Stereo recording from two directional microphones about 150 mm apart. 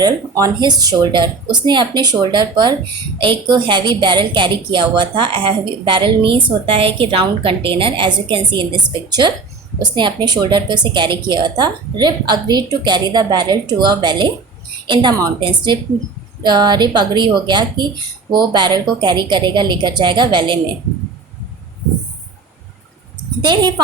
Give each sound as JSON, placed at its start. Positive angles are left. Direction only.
{"t": 0.0, "sound": "a woman's voice", "side_deg": -25}
{"t": 23.4, "sound": "a woman's voice", "side_deg": -30}